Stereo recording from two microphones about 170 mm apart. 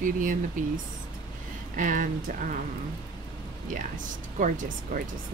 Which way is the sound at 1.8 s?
50° right (ahead or behind).